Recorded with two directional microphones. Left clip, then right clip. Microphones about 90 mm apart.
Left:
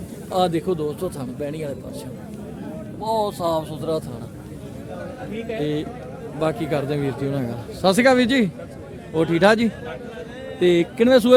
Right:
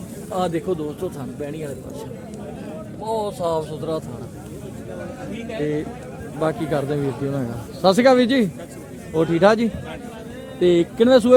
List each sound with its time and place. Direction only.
0.3 s a man's voice: 40° left (ahead or behind)
3.0 s speech: 30° left (ahead or behind)
6.4 s a man's voice: 5° left (ahead or behind)
7.8 s a man's voice: 5° left (ahead or behind)
9.1 s a man's voice: 20° left (ahead or behind)